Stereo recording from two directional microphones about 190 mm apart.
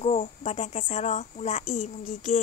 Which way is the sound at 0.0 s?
35° left (ahead or behind).